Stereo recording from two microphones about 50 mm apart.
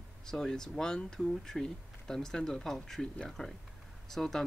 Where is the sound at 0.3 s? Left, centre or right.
Centre.